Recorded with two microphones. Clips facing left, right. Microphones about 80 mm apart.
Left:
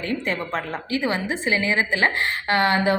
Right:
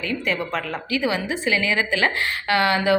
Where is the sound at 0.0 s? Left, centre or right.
Left.